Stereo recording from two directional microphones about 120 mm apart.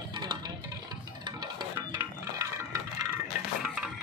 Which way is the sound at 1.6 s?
30° right (ahead or behind).